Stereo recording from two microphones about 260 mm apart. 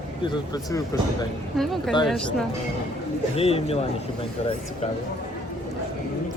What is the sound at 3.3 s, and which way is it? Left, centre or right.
Speech, left.